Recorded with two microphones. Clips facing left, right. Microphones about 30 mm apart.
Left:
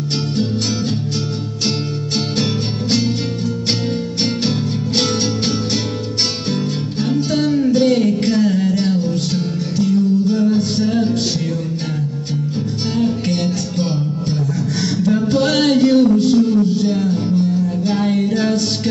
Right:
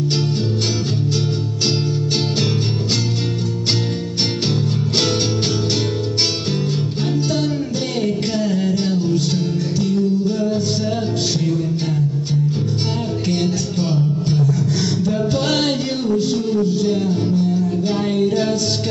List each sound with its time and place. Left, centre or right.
7.7 s a sound: left
8.3 s music: left
13.0 s music: left
15.3 s music: left